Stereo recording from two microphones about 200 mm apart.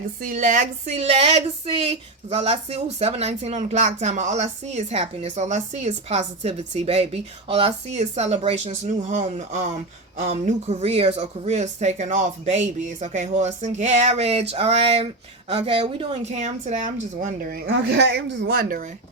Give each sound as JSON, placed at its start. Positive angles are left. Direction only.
{"t": 0.2, "sound": "speech", "side_deg": -40}
{"t": 17.7, "sound": "a woman's voice", "side_deg": -60}